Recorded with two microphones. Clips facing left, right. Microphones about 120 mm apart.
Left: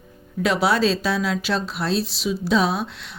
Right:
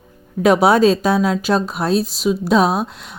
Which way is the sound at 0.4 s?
50° right (ahead or behind).